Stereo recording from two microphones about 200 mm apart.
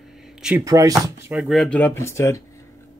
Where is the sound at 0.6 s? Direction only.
15° right (ahead or behind).